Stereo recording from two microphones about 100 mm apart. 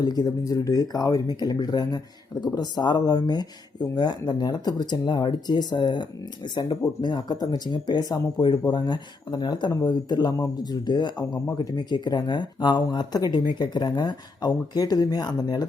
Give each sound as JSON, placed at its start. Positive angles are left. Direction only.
{"t": 0.0, "sound": "speech", "side_deg": 40}